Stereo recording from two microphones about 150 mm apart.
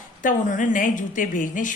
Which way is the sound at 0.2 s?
60° left (ahead or behind).